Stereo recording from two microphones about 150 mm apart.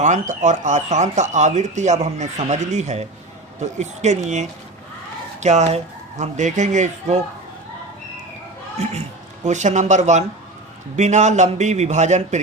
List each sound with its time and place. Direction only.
0.0 s speech: 55° right (ahead or behind)
8.8 s speech: 45° right (ahead or behind)